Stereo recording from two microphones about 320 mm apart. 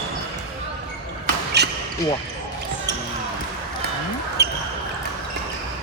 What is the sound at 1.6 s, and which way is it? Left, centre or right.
Basketball bounce, right.